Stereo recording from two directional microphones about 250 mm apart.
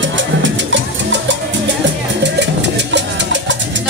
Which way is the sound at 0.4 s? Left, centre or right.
Right.